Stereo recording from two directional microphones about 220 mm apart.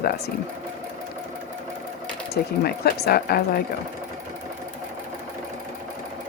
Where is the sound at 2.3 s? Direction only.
45° left (ahead or behind).